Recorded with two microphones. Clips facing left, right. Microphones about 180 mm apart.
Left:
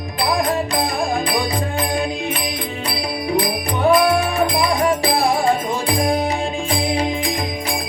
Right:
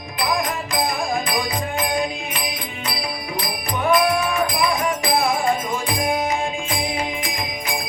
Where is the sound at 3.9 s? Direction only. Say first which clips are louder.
Left 2 dB; 35° left (ahead or behind).